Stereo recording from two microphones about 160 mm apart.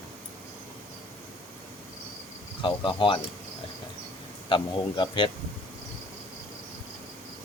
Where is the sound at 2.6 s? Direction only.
30° left (ahead or behind).